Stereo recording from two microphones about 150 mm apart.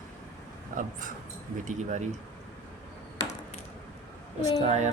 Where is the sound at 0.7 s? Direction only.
60° right (ahead or behind).